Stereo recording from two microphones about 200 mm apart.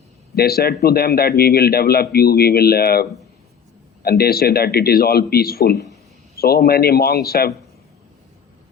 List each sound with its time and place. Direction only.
0.3 s speech: 50° left (ahead or behind)